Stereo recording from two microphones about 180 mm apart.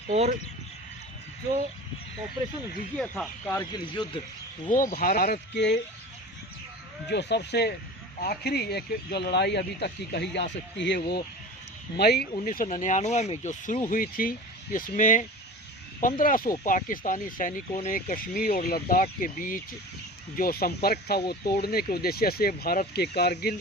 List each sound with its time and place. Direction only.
0.1 s speech: 35° right (ahead or behind)
3.0 s speech: 5° left (ahead or behind)
3.5 s speech: 20° left (ahead or behind)
4.7 s speech: 50° left (ahead or behind)
5.5 s speech: 75° left (ahead or behind)
7.1 s speech: 70° left (ahead or behind)